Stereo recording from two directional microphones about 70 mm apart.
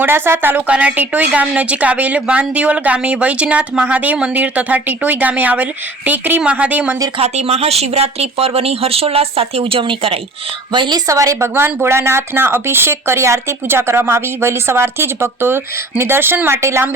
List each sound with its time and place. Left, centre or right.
0.0 s a woman's voice: right
0.7 s a woman's voice: centre
10.7 s a woman's voice: right
11.0 s speech: right
11.4 s speech: right
16.6 s speech: right